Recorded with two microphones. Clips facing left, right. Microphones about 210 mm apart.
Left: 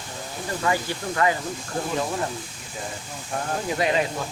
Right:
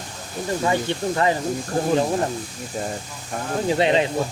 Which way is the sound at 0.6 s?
25° right (ahead or behind).